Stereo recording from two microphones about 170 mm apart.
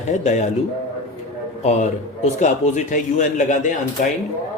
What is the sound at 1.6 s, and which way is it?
A man's voice, 40° left (ahead or behind).